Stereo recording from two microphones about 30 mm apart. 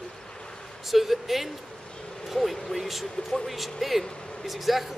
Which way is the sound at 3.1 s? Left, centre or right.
Centre.